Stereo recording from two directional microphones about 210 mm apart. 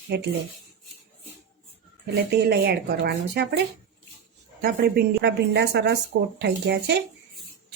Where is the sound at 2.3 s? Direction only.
50° right (ahead or behind).